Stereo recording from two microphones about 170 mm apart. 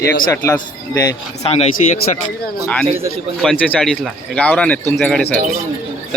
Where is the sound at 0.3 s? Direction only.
15° left (ahead or behind).